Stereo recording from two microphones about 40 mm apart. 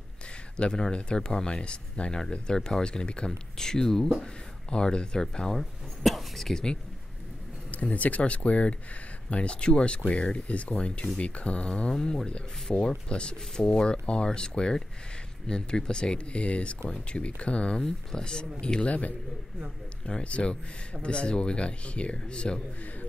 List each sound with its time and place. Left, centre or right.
0.6 s speech: left
3.3 s speech: centre
5.5 s speech: centre
6.5 s speech: centre
7.7 s speech: left
12.7 s speech: left
13.1 s speech: left
20.1 s speech: left